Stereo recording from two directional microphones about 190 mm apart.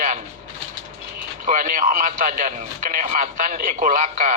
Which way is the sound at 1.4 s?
45° right (ahead or behind).